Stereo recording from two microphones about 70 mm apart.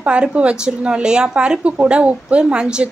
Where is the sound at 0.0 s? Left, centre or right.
Centre.